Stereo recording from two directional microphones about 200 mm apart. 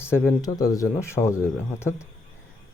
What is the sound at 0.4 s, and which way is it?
Speech, 20° left (ahead or behind).